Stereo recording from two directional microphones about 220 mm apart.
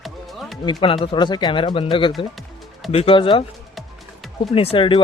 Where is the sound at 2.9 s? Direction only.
25° left (ahead or behind).